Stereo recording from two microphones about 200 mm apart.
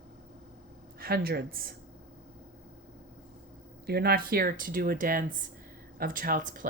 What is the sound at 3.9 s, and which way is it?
Speech, 50° right (ahead or behind).